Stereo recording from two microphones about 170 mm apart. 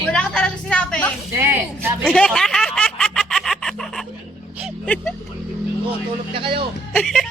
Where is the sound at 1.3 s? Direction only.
15° right (ahead or behind).